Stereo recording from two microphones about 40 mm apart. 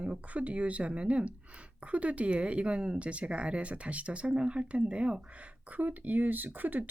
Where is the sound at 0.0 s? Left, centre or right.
Right.